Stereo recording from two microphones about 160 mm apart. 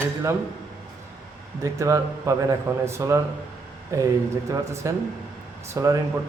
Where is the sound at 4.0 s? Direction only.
20° right (ahead or behind).